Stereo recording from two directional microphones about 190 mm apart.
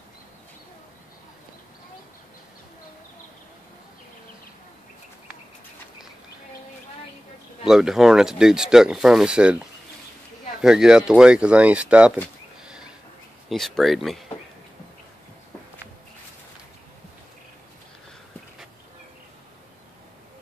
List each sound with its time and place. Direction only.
7.6 s speech: centre (ahead or behind)
10.6 s speech: 5° right (ahead or behind)
13.5 s speech: centre (ahead or behind)